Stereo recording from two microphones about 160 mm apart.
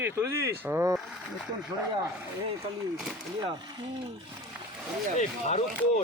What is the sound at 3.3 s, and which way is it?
Speech, 25° right (ahead or behind).